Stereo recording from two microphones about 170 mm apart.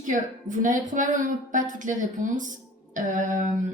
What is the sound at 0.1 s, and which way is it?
A woman's voice, 50° right (ahead or behind).